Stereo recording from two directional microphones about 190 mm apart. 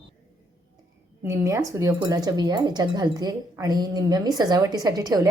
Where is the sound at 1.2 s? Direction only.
15° right (ahead or behind).